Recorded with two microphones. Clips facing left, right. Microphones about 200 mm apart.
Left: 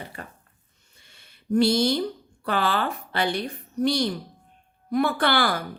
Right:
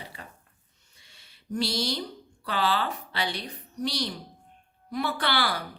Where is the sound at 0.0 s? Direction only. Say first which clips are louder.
Left 5 dB; 55° left (ahead or behind).